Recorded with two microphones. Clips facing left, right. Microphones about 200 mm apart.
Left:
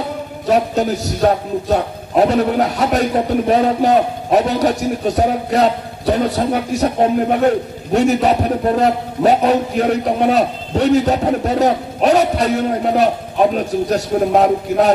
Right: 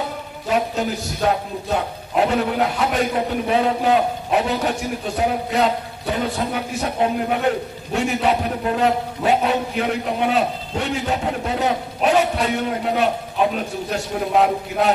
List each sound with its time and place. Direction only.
0.5 s a man's voice: 40° left (ahead or behind)